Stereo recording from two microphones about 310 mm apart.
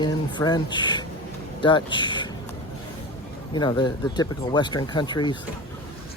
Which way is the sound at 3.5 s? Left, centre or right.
Centre.